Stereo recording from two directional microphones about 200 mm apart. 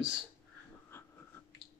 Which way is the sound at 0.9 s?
10° left (ahead or behind).